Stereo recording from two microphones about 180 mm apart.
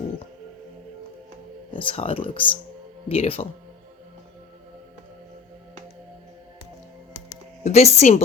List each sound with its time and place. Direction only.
1.7 s speech: 25° left (ahead or behind)
7.6 s speech: 35° left (ahead or behind)